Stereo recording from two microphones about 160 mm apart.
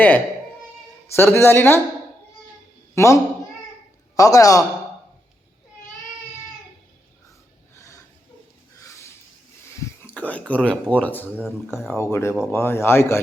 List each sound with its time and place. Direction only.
1.1 s speech: 15° left (ahead or behind)
2.9 s a man's voice: 20° left (ahead or behind)
4.2 s a man's voice: 20° left (ahead or behind)
7.8 s snort: 20° left (ahead or behind)
10.0 s a sound: 10° left (ahead or behind)
10.5 s speech: 5° left (ahead or behind)
11.3 s speech: centre (ahead or behind)
11.9 s speech: 15° left (ahead or behind)